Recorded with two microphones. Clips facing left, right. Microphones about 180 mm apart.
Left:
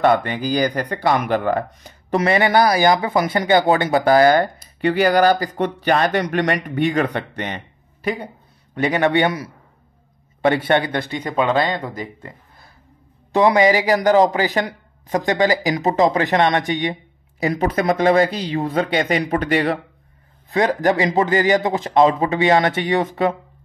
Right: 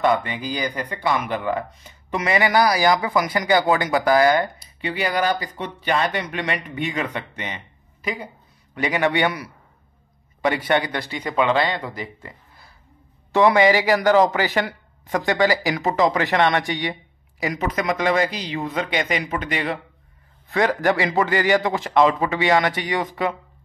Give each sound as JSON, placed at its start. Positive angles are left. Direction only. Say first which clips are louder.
{"t": 0.4, "sound": "speech", "louder": "left 7 dB", "side_deg": 40}
{"t": 8.8, "sound": "speech", "louder": "left 3 dB", "side_deg": 40}
{"t": 10.4, "sound": "speech", "louder": "left 4 dB", "side_deg": 30}
{"t": 11.2, "sound": "speech", "louder": "left 1 dB", "side_deg": 45}
{"t": 13.3, "sound": "speech", "louder": "left 1 dB", "side_deg": 20}
{"t": 17.4, "sound": "speech", "louder": "left 5 dB", "side_deg": 30}
{"t": 20.4, "sound": "speech", "louder": "left 2 dB", "side_deg": 20}